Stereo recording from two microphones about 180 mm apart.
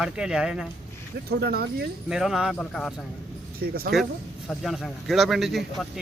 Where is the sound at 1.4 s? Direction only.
60° right (ahead or behind).